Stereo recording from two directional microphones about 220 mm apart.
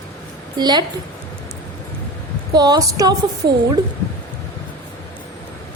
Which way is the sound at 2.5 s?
20° right (ahead or behind).